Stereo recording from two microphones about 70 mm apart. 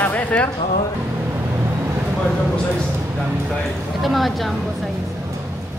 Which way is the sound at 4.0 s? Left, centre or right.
Centre.